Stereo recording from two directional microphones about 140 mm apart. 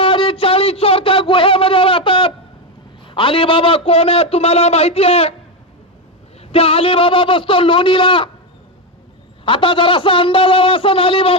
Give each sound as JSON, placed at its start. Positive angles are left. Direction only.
{"t": 0.0, "sound": "a sound", "side_deg": 40}
{"t": 3.1, "sound": "a man's voice", "side_deg": 40}
{"t": 6.4, "sound": "a man's voice", "side_deg": 45}
{"t": 9.4, "sound": "a man's voice", "side_deg": 40}